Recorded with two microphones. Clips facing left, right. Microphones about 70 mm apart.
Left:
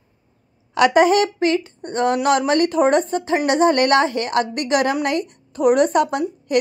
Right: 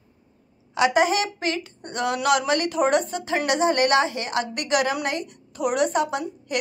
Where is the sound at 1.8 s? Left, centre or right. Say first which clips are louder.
Left 4 dB; left.